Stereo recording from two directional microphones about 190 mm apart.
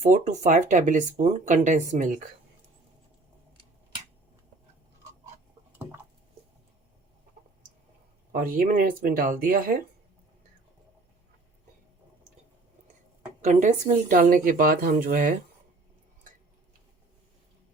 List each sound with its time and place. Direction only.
0.0 s speech: 40° right (ahead or behind)
8.3 s speech: 50° right (ahead or behind)
13.4 s speech: 40° right (ahead or behind)